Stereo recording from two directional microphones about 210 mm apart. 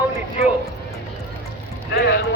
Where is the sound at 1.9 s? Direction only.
50° left (ahead or behind).